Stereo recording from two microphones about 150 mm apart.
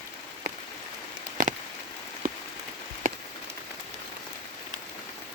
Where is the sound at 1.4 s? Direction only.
65° right (ahead or behind).